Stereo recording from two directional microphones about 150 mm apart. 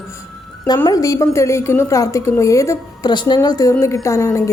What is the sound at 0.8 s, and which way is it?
A woman's voice, 25° left (ahead or behind).